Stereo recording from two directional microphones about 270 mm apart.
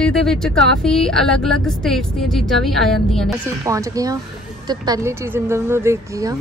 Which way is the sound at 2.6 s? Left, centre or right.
Centre.